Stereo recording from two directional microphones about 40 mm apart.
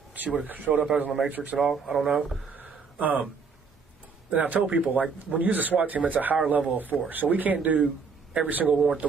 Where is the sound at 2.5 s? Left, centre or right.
Right.